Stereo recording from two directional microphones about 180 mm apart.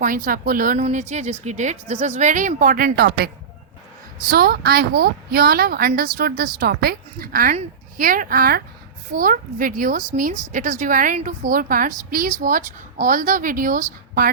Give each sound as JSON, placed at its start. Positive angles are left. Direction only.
{"t": 0.0, "sound": "a woman's voice", "side_deg": -50}
{"t": 4.3, "sound": "a woman's voice", "side_deg": -55}